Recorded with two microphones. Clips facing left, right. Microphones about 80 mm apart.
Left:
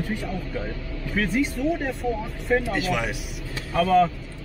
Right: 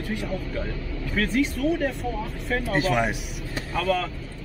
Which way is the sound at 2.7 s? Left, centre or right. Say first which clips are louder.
Right 3 dB; right.